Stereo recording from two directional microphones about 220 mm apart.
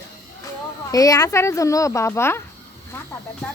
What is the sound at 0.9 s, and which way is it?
Speech, 15° left (ahead or behind).